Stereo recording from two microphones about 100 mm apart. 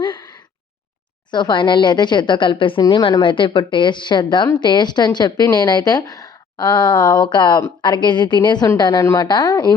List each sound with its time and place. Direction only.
0.0 s sigh: 50° left (ahead or behind)
1.3 s a woman's voice: 50° left (ahead or behind)